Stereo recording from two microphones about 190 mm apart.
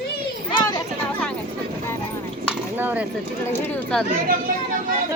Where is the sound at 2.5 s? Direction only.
10° right (ahead or behind).